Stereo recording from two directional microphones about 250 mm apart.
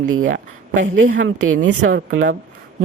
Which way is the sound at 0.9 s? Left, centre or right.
Right.